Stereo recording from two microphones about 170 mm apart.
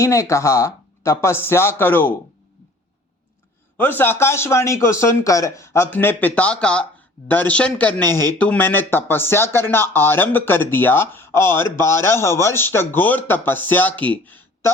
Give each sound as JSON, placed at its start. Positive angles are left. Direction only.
{"t": 0.0, "sound": "speech", "side_deg": 15}
{"t": 3.8, "sound": "speech", "side_deg": 10}